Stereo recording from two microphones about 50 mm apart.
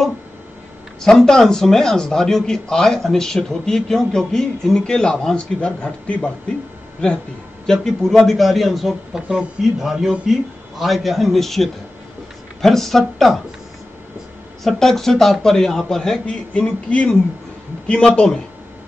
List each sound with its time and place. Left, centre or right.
1.0 s speech: centre
7.6 s speech: centre
14.6 s speech: centre
16.3 s speech: left